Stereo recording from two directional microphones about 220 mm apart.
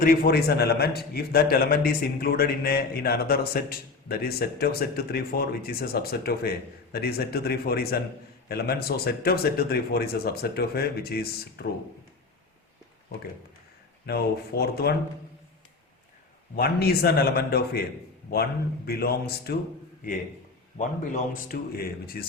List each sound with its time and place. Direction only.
0.0 s a man's voice: 40° left (ahead or behind)
14.1 s a man's voice: 45° left (ahead or behind)
16.6 s a man's voice: 45° left (ahead or behind)
18.9 s a man's voice: 45° left (ahead or behind)
20.7 s a man's voice: 35° left (ahead or behind)